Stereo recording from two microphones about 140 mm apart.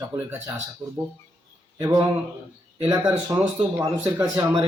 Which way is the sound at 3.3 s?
15° right (ahead or behind).